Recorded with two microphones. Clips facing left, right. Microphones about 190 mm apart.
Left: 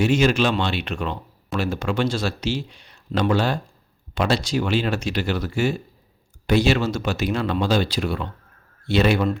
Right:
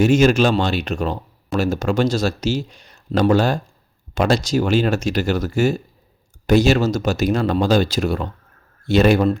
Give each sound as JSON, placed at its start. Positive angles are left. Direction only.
{"t": 0.0, "sound": "speech", "side_deg": -45}